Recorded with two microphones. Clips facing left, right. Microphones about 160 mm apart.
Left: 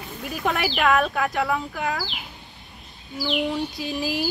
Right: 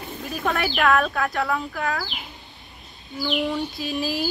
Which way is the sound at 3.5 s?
20° left (ahead or behind).